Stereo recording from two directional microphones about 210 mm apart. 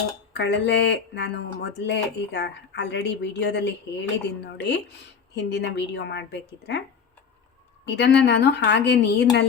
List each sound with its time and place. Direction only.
0.3 s speech: 55° left (ahead or behind)
7.9 s speech: 55° left (ahead or behind)